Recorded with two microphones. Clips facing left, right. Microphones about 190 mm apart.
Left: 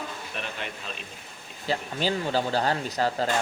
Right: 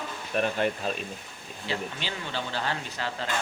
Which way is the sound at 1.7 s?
40° left (ahead or behind).